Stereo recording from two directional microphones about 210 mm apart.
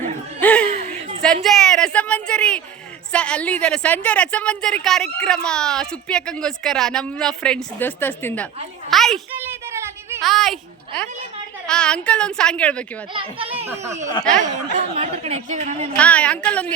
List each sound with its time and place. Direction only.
0.3 s chuckle: 5° left (ahead or behind)
1.2 s a woman's voice: centre (ahead or behind)
9.4 s a sound: 10° right (ahead or behind)
10.2 s a woman's voice: centre (ahead or behind)
13.1 s a child's voice: 25° right (ahead or behind)
16.0 s a woman's voice: 5° left (ahead or behind)